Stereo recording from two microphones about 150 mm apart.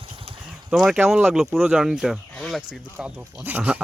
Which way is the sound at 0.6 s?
5° right (ahead or behind).